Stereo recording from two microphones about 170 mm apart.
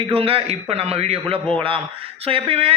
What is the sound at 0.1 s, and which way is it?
Speech, 35° right (ahead or behind).